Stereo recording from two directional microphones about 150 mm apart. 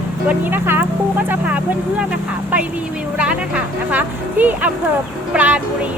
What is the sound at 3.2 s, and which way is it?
Speech, 5° right (ahead or behind).